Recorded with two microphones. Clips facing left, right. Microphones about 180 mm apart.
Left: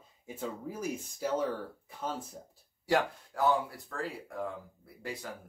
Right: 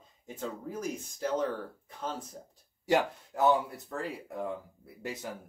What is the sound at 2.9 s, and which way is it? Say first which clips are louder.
Speech: right 2 dB; 20° right (ahead or behind).